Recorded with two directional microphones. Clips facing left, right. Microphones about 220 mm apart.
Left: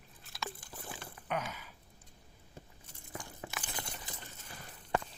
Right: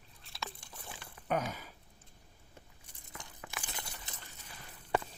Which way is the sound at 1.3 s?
40° right (ahead or behind).